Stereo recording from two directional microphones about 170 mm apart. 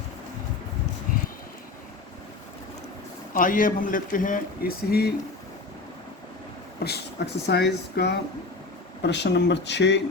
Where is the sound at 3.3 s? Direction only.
55° left (ahead or behind).